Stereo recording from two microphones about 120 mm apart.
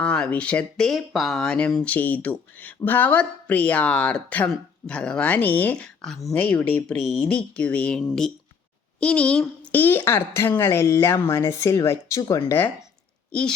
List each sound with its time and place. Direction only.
0.0 s speech: 10° left (ahead or behind)
6.3 s a woman's voice: 15° left (ahead or behind)